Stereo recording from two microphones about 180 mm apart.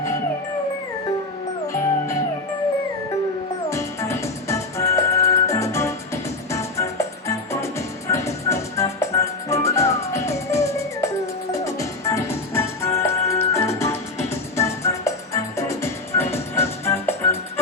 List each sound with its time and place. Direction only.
1.6 s music: 15° left (ahead or behind)
3.7 s music: 15° left (ahead or behind)